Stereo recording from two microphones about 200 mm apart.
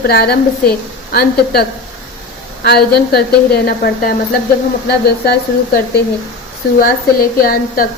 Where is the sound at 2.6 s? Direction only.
55° left (ahead or behind).